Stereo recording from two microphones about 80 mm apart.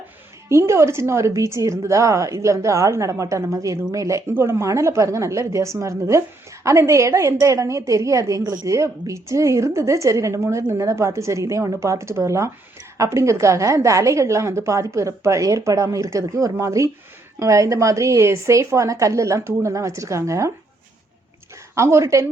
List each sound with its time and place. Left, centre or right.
0.4 s a woman's voice: right
21.8 s a woman's voice: right